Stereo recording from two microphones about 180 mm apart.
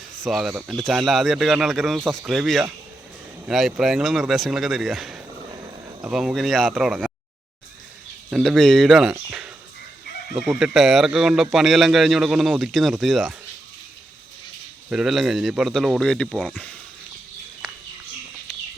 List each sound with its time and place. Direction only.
0.2 s speech: centre (ahead or behind)
5.5 s a sound: 20° right (ahead or behind)
6.0 s speech: 5° right (ahead or behind)
8.3 s speech: centre (ahead or behind)
14.8 s speech: centre (ahead or behind)